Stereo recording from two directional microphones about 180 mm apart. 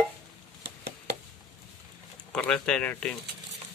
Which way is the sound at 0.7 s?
65° right (ahead or behind).